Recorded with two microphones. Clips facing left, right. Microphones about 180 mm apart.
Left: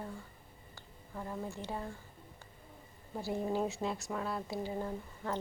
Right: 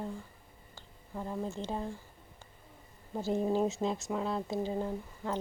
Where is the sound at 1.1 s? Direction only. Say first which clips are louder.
Right 4 dB; 15° right (ahead or behind).